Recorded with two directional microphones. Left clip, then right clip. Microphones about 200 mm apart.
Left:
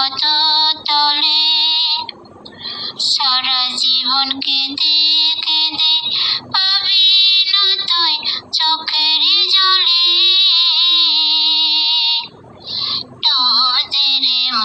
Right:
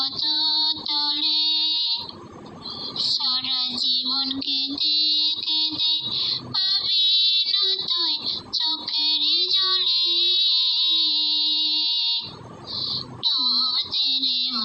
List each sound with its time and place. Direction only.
0.0 s female singing: 50° left (ahead or behind)
2.8 s child singing: 45° left (ahead or behind)
12.9 s synthetic singing: 50° left (ahead or behind)